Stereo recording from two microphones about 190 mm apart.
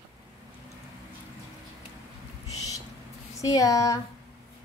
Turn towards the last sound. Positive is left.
turn(degrees=15)  # may be behind; listen again after turning